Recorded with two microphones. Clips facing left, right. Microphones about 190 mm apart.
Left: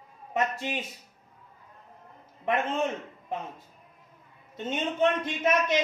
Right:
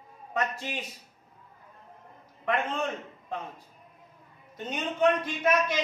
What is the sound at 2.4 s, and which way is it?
Speech, 20° left (ahead or behind).